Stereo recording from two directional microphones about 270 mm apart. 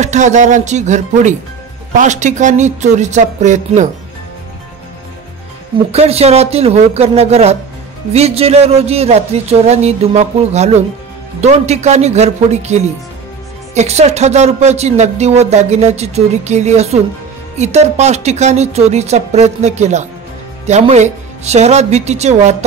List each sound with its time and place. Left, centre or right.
0.0 s speech: right
5.9 s speech: right